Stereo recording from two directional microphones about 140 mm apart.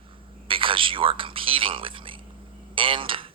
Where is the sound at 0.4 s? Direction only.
40° right (ahead or behind).